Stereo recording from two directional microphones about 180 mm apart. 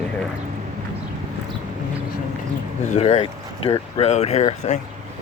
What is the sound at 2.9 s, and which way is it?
Speech, 40° left (ahead or behind).